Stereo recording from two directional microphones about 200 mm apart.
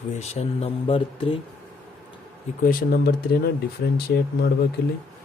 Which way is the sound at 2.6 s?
45° left (ahead or behind).